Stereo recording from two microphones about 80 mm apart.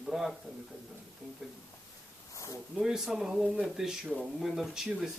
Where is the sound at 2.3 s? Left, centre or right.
Left.